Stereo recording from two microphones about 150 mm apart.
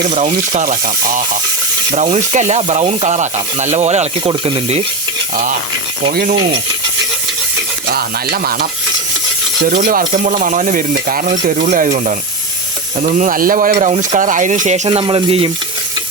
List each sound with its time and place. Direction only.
0.1 s speech: 45° right (ahead or behind)
2.1 s speech: 50° right (ahead or behind)
4.2 s speech: 30° right (ahead or behind)
7.9 s a sound: 85° right
9.6 s stir: 70° right (ahead or behind)
10.1 s stir: 55° right (ahead or behind)
14.8 s speech: 35° right (ahead or behind)